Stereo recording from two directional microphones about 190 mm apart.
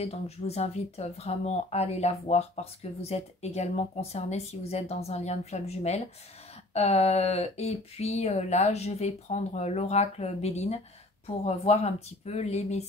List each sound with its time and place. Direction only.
0.0 s speech: 35° left (ahead or behind)